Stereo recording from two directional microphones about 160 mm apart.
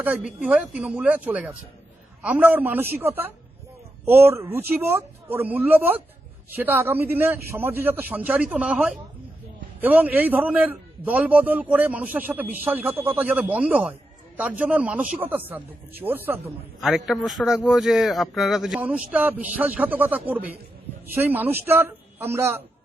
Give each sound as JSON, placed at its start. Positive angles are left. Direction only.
{"t": 0.2, "sound": "a man's voice", "side_deg": -5}
{"t": 16.8, "sound": "a man's voice", "side_deg": 0}